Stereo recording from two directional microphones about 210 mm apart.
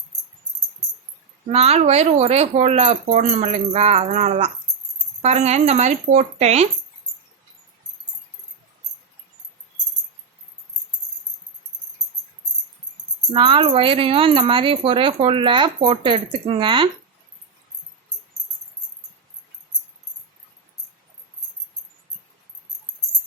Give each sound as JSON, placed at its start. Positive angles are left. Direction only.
{"t": 1.5, "sound": "speech", "side_deg": -30}
{"t": 13.3, "sound": "speech", "side_deg": -25}